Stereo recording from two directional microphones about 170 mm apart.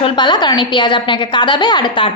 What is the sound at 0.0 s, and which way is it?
A woman's voice, 25° left (ahead or behind).